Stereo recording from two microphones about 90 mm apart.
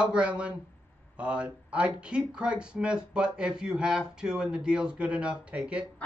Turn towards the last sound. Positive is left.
turn(degrees=-10)  # may be behind; listen again after turning